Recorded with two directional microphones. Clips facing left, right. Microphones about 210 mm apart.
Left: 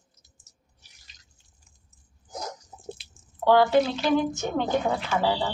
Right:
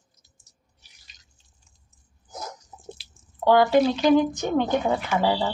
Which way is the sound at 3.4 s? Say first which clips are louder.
Right 2 dB; 15° right (ahead or behind).